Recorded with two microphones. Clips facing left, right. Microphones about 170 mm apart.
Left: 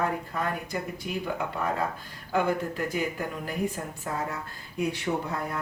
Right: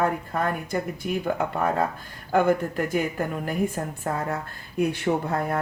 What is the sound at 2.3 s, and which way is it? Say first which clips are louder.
Speech: right 5 dB; 55° right (ahead or behind).